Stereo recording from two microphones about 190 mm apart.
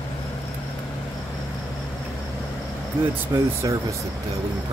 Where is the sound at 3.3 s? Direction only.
20° right (ahead or behind).